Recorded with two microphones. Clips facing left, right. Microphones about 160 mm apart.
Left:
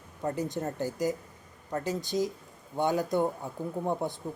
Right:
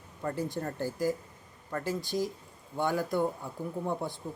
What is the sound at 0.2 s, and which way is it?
Speech, 20° left (ahead or behind).